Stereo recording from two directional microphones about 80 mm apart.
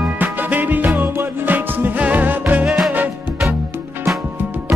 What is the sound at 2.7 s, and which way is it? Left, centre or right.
Music, centre.